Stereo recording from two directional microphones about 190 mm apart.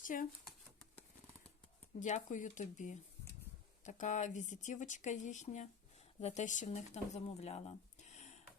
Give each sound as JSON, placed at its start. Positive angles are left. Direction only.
{"t": 0.0, "sound": "speech", "side_deg": 45}
{"t": 2.0, "sound": "speech", "side_deg": 40}